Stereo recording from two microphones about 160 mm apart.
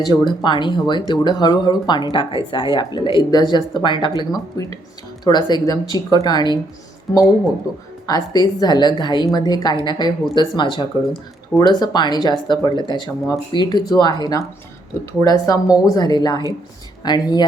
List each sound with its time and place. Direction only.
0.1 s a woman's voice: 30° left (ahead or behind)
8.0 s a woman's voice: 25° left (ahead or behind)